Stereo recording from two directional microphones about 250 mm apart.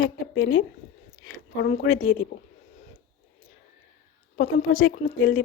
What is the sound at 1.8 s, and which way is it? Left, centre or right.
Speech, left.